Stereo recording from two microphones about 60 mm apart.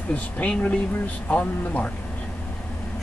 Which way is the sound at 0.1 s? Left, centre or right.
Left.